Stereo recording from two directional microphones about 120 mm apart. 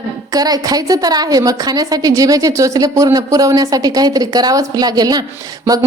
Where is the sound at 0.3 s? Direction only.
30° right (ahead or behind).